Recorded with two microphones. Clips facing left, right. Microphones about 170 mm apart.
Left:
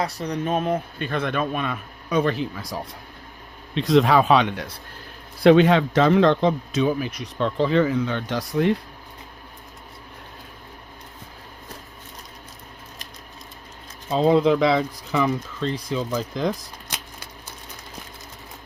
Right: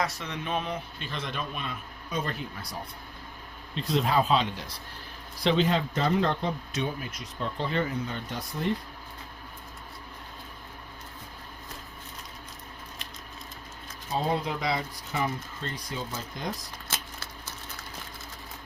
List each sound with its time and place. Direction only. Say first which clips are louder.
0.0 s speech: left 6 dB; 35° left (ahead or behind); by 8.7 s 90° left
14.1 s speech: left 11 dB; 90° left